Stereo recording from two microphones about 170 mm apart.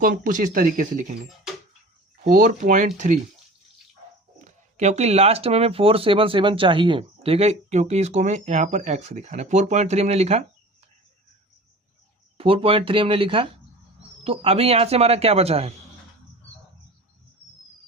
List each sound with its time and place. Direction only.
0.0 s speech: 50° right (ahead or behind)
2.3 s speech: 50° right (ahead or behind)
4.4 s speech: 45° right (ahead or behind)
12.4 s speech: 30° right (ahead or behind)